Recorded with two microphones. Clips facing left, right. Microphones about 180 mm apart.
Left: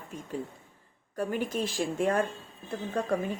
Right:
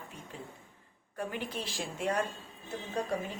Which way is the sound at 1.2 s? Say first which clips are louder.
Left 7 dB; 45° left (ahead or behind).